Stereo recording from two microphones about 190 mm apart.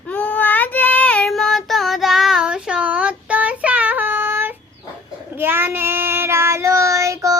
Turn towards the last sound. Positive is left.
turn(degrees=-15)  # may be behind; listen again after turning